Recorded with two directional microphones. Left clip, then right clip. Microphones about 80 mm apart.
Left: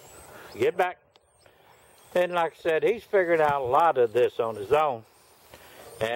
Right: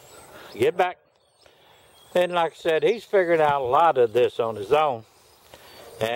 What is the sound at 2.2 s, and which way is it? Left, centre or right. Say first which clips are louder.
A man's voice: right 3 dB; centre.